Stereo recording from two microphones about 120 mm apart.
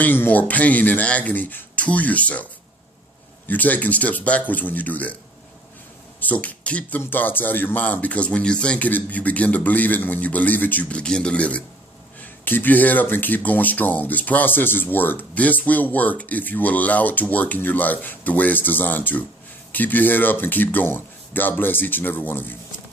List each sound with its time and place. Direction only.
0.0 s speech: 15° left (ahead or behind)
6.1 s speech: 15° left (ahead or behind)